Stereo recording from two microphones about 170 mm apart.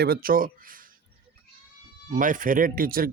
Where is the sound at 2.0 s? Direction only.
50° right (ahead or behind).